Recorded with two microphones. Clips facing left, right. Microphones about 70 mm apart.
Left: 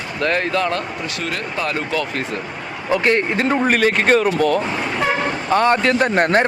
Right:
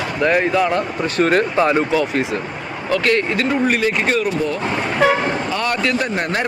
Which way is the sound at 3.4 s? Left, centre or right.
Left.